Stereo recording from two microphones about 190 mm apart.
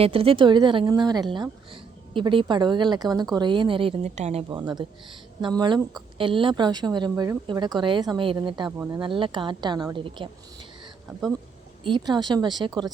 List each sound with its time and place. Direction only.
0.0 s a woman's voice: 30° right (ahead or behind)
11.8 s a woman's voice: 25° right (ahead or behind)